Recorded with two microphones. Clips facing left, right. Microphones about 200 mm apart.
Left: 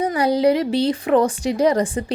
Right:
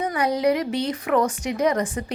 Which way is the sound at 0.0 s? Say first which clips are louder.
Left 4 dB; 30° left (ahead or behind).